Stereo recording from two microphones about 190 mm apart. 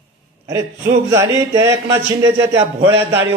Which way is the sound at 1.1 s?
15° right (ahead or behind).